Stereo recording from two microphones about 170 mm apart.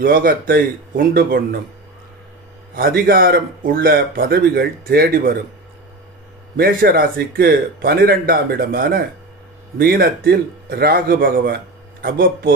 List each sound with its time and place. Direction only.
0.0 s a man's voice: 55° right (ahead or behind)
2.7 s a man's voice: 60° right (ahead or behind)
6.5 s a man's voice: 60° right (ahead or behind)